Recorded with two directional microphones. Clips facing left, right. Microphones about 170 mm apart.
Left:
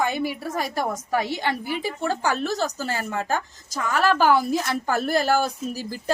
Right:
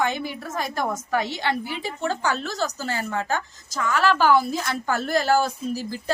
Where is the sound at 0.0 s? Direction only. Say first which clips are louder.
Left 1 dB; 10° left (ahead or behind).